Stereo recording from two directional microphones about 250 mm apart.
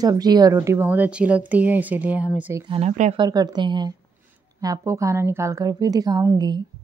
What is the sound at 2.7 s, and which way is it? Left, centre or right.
Speech, right.